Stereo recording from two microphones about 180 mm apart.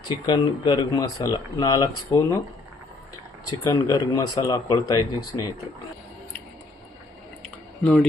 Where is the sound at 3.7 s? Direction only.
20° left (ahead or behind).